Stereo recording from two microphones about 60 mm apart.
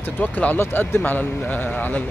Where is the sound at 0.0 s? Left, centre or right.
Left.